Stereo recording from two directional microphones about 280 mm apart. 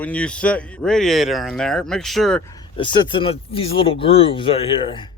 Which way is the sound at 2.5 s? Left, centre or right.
Centre.